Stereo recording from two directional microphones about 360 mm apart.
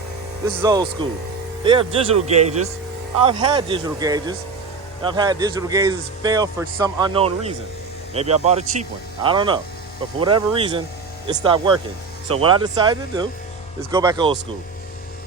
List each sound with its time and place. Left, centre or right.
0.4 s a man's voice: centre